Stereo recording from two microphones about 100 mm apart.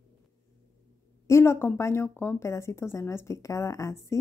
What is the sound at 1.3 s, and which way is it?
Speech, 25° left (ahead or behind).